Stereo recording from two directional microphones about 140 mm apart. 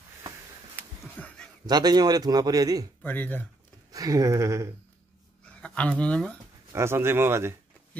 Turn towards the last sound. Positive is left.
turn(degrees=-15)  # may be behind; listen again after turning